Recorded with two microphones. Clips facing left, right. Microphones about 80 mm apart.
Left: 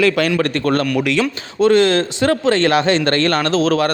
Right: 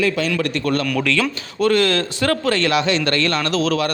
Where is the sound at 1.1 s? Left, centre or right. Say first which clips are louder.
Left 2 dB; left.